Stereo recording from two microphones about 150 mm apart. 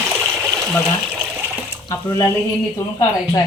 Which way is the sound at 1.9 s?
25° left (ahead or behind).